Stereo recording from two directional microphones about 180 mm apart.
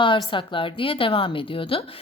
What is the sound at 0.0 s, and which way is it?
A woman's voice, 25° left (ahead or behind).